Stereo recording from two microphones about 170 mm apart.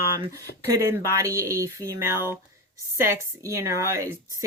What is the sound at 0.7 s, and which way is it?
Speech, 20° right (ahead or behind).